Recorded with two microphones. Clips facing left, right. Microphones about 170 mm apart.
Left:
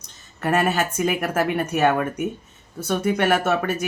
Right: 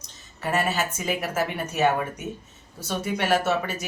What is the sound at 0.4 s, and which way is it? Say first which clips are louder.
Speech: left 4 dB; 55° left (ahead or behind).